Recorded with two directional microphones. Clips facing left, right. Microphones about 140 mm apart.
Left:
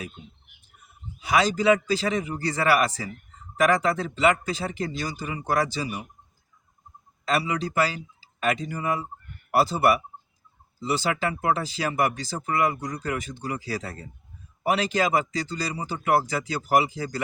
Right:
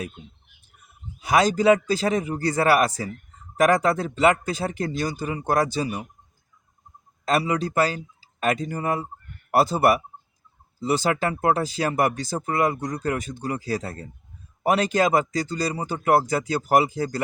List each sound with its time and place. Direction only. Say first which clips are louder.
1.2 s speech: right 3 dB; 45° right (ahead or behind)
7.3 s speech: right 3 dB; 45° right (ahead or behind)